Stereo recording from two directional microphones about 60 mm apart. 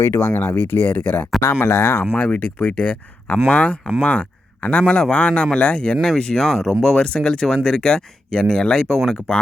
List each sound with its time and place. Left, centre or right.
0.1 s speech: left
0.3 s speech: left
1.4 s speech: left
2.1 s speech: left; by 9.3 s centre